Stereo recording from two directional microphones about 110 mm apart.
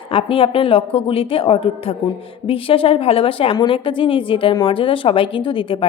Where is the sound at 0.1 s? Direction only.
55° left (ahead or behind).